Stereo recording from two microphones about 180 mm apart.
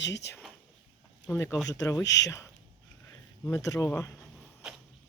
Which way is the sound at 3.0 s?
15° left (ahead or behind).